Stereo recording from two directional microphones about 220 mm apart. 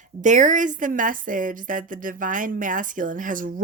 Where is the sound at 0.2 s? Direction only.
35° right (ahead or behind).